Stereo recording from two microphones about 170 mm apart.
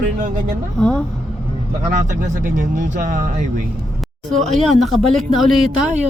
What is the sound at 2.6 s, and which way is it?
Speech, 50° right (ahead or behind).